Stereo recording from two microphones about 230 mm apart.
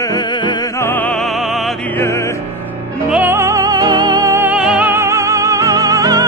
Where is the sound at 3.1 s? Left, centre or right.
Centre.